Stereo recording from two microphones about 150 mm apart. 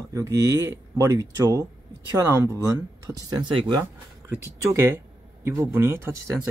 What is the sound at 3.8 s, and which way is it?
Speech, 15° right (ahead or behind).